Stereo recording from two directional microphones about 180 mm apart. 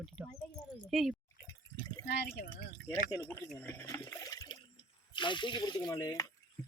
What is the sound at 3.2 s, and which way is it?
Speech, 5° left (ahead or behind).